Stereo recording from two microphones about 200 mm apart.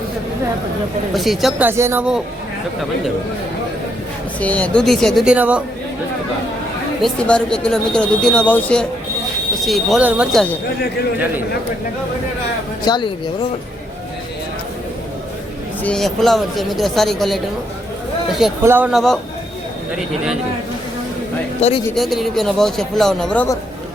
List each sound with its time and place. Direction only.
1.1 s speech: centre (ahead or behind)
4.4 s speech: 5° left (ahead or behind)
7.0 s speech: 5° left (ahead or behind)
12.8 s speech: 20° left (ahead or behind)
15.8 s speech: 5° left (ahead or behind)
18.6 s speech: 10° right (ahead or behind)
21.9 s speech: centre (ahead or behind)